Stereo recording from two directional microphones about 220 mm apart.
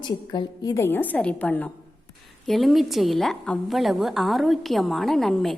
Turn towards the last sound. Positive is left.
turn(degrees=0)  # may be behind; listen again after turning